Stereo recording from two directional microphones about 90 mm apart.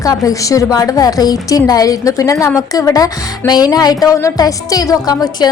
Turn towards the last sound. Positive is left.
turn(degrees=45)  # may be behind; listen again after turning